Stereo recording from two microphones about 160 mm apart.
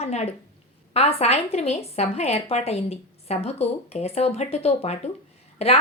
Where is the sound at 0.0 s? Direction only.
40° left (ahead or behind).